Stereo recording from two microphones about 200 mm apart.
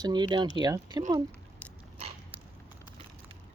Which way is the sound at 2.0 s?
30° right (ahead or behind).